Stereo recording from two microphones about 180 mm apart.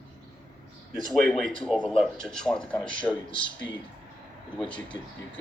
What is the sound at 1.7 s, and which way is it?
Speech, 5° right (ahead or behind).